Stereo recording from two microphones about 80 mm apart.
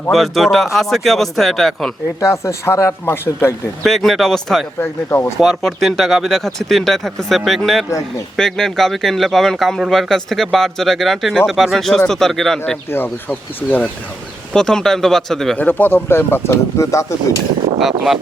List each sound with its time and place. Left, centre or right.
0.1 s speech: centre
2.2 s speech: left
3.8 s speech: centre
4.8 s speech: left
5.4 s speech: centre
12.9 s speech: left
14.5 s speech: centre
15.5 s speech: left
17.7 s speech: centre